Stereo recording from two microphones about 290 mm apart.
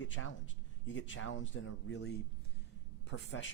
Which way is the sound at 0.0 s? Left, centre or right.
Left.